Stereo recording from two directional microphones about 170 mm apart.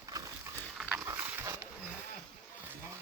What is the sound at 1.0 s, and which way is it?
Dog, 15° right (ahead or behind).